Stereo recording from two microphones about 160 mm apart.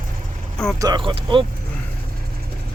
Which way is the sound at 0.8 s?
30° right (ahead or behind).